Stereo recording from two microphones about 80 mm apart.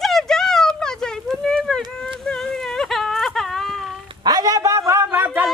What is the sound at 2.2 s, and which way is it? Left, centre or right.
Whimper, centre.